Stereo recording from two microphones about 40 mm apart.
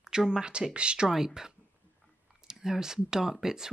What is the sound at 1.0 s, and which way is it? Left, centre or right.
Speech, centre.